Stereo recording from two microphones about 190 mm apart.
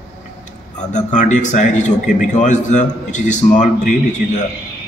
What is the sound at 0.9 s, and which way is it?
A man's voice, 40° left (ahead or behind).